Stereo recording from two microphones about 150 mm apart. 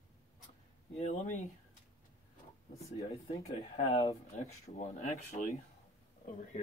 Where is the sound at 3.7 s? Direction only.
45° left (ahead or behind).